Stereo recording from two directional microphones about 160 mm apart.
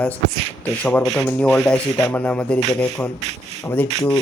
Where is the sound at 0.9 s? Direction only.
5° left (ahead or behind).